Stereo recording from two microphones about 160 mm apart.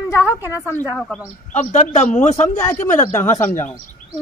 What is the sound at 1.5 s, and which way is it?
A man's voice, 50° left (ahead or behind).